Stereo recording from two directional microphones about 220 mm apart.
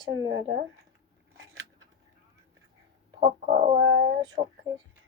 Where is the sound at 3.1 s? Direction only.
20° right (ahead or behind).